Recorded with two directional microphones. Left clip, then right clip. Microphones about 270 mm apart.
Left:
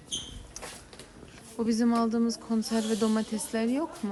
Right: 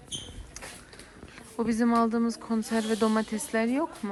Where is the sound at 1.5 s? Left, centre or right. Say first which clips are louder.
Right 1 dB; centre.